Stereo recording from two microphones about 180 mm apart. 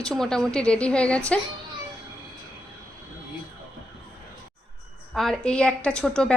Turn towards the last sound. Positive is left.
turn(degrees=5)  # may be behind; listen again after turning